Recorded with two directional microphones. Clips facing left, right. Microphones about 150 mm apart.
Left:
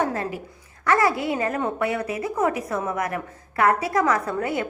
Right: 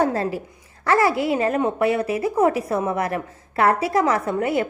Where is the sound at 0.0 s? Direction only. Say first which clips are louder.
Right 4 dB; 35° right (ahead or behind).